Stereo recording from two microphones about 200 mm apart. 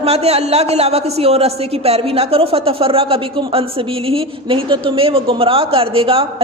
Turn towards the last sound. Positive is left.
turn(degrees=-25)  # may be behind; listen again after turning